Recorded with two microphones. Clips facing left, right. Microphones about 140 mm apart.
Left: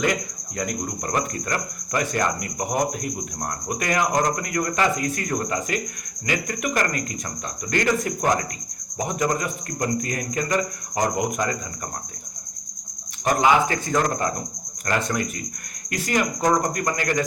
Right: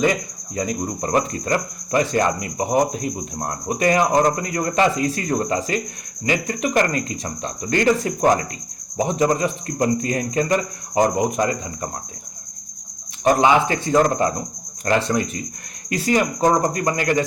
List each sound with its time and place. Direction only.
0.5 s speech: 25° right (ahead or behind)
13.2 s speech: 25° right (ahead or behind)